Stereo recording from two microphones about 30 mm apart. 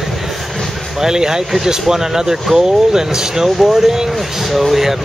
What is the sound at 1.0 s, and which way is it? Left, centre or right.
Speech, right.